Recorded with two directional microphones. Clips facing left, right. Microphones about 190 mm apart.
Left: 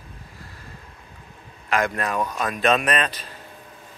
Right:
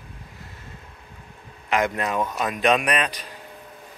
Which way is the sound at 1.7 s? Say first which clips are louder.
Even; 20° right (ahead or behind).